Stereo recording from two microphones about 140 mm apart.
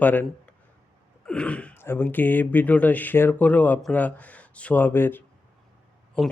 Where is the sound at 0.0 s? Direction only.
15° left (ahead or behind).